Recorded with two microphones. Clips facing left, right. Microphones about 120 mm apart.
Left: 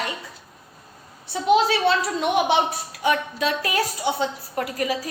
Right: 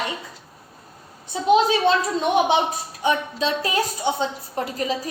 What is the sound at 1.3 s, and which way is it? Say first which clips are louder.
A woman's voice: right 1 dB; 20° right (ahead or behind).